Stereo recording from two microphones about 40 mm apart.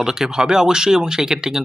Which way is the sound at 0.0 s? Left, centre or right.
Centre.